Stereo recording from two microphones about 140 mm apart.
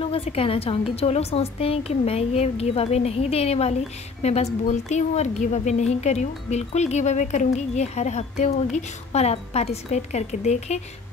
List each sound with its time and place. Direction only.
0.0 s a woman's voice: 45° left (ahead or behind)